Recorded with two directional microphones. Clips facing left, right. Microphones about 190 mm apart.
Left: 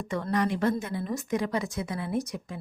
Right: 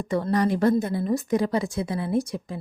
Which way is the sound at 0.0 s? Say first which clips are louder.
Right 5 dB; 35° right (ahead or behind).